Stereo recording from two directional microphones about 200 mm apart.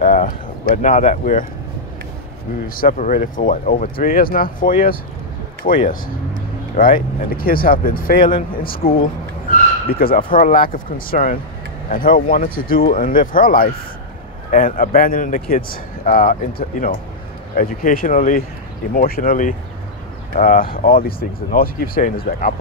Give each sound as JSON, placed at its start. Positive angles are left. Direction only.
{"t": 0.0, "sound": "a sound", "side_deg": 40}
{"t": 0.8, "sound": "speech", "side_deg": 35}
{"t": 2.7, "sound": "a man's voice", "side_deg": 45}
{"t": 9.9, "sound": "a man's voice", "side_deg": 45}